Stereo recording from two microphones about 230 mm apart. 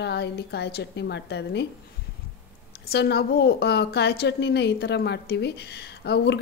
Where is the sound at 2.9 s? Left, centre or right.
Left.